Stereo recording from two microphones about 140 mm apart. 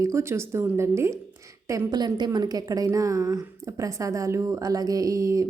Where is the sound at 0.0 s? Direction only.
20° right (ahead or behind).